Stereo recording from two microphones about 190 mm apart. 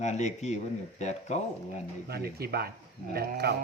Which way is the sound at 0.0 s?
35° left (ahead or behind).